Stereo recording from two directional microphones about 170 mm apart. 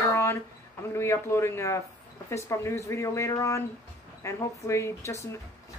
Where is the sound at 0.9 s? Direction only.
15° left (ahead or behind).